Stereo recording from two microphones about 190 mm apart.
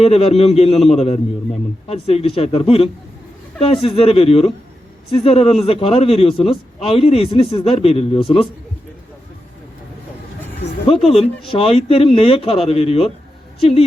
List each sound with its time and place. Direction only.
0.0 s a man's voice: 30° left (ahead or behind)
10.8 s a man's voice: 30° left (ahead or behind)